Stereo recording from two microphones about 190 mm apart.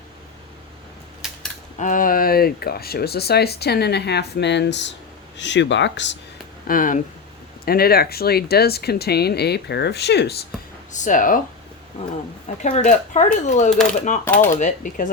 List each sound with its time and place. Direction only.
1.2 s a sound: centre (ahead or behind)
1.8 s speech: 45° left (ahead or behind); by 6.1 s 70° left (ahead or behind)
6.7 s speech: 45° left (ahead or behind); by 10.3 s 60° left (ahead or behind)
10.9 s speech: 40° left (ahead or behind)
12.7 s speech: 40° left (ahead or behind)
14.3 s speech: 10° left (ahead or behind)
14.6 s speech: 45° left (ahead or behind)